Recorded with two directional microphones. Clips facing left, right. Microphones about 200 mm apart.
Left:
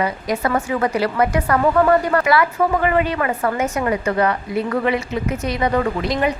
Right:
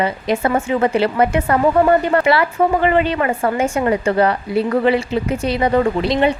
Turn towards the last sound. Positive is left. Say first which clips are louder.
# right 4 dB
turn(degrees=-30)  # may be behind; listen again after turning